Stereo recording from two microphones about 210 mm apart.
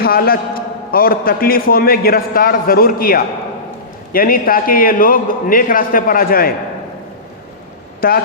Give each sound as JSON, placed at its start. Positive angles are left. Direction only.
{"t": 0.0, "sound": "a man's voice", "side_deg": 45}
{"t": 8.0, "sound": "a man's voice", "side_deg": 45}